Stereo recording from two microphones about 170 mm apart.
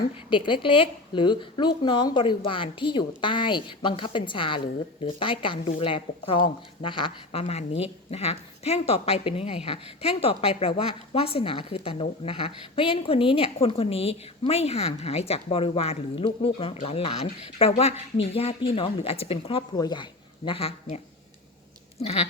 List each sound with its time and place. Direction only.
0.3 s speech: 30° left (ahead or behind)